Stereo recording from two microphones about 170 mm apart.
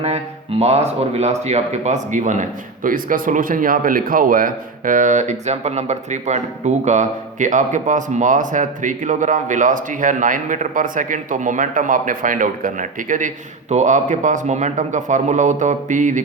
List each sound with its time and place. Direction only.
0.6 s speech: 40° right (ahead or behind)